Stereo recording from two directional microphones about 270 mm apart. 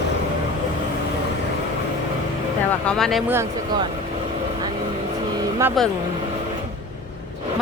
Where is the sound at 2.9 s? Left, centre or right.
Centre.